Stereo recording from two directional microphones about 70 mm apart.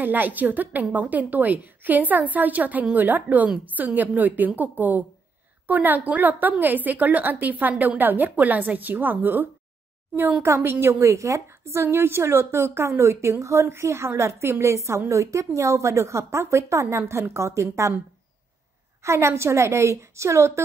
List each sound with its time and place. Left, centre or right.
0.0 s a woman's voice: right
19.0 s a woman's voice: right